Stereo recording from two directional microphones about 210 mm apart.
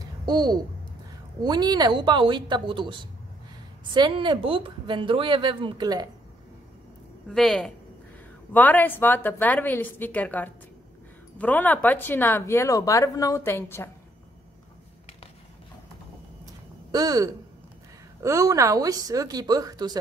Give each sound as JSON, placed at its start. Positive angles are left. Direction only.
{"t": 0.2, "sound": "a woman's voice", "side_deg": -20}
{"t": 7.2, "sound": "a woman's voice", "side_deg": 0}
{"t": 16.9, "sound": "a woman's voice", "side_deg": -15}